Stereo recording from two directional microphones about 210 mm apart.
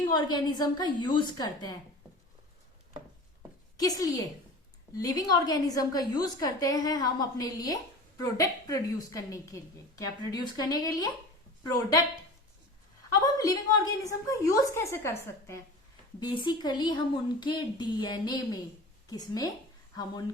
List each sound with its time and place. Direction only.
0.1 s a woman's voice: 20° left (ahead or behind)
3.8 s a woman's voice: 15° left (ahead or behind)
13.2 s a woman's voice: 15° left (ahead or behind)